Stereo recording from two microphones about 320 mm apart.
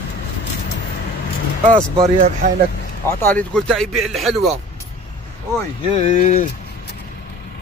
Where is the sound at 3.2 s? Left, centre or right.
Centre.